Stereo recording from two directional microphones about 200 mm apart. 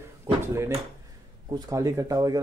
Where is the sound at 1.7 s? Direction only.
15° right (ahead or behind).